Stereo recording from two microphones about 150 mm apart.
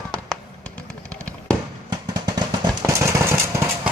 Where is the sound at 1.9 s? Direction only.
25° right (ahead or behind).